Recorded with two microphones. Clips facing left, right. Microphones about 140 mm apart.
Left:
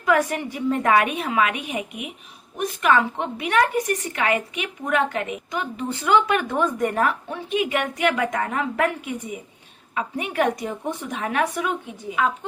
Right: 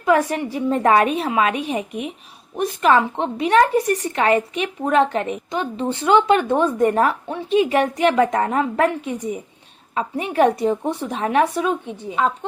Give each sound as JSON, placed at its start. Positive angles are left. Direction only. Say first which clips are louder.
{"t": 0.0, "sound": "a woman's voice", "louder": "right 3 dB", "side_deg": -25}